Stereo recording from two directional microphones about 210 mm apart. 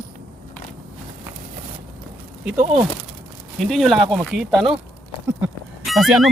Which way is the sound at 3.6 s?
Centre (ahead or behind).